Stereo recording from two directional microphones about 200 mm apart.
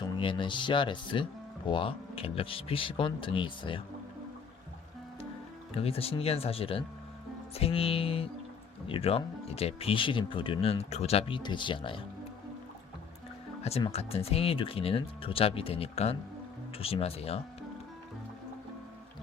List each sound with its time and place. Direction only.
0.0 s speech: 25° left (ahead or behind)
5.7 s speech: 30° left (ahead or behind)
13.7 s speech: 30° left (ahead or behind)